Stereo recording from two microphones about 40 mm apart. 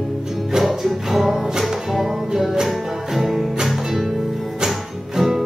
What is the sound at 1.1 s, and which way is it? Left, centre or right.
Music, centre.